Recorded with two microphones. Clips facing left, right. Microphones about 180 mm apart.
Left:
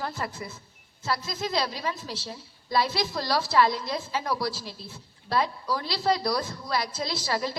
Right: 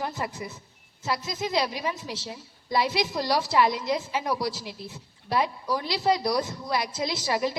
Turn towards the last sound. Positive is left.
turn(degrees=-15)  # may be behind; listen again after turning